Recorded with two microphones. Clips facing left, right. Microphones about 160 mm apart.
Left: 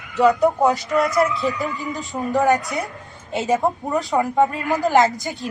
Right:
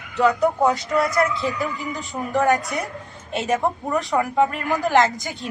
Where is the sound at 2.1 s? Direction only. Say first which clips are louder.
Left 3 dB; 5° left (ahead or behind).